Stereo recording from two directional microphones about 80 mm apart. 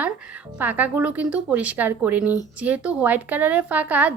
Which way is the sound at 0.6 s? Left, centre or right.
Right.